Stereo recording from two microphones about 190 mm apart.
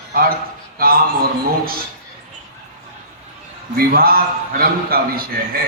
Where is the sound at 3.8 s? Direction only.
50° right (ahead or behind).